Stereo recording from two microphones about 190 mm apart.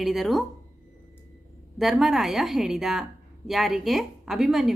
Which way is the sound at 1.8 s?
Centre (ahead or behind).